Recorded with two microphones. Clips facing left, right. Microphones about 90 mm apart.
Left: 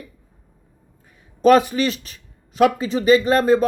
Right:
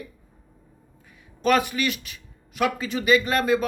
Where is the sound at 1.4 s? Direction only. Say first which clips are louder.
Left 7 dB; 35° left (ahead or behind).